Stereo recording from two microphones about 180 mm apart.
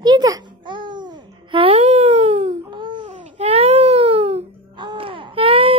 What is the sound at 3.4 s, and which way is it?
Music, 35° right (ahead or behind).